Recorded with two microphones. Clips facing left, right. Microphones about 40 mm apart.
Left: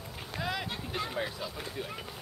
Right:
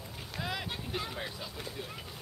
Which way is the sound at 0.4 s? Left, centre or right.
Centre.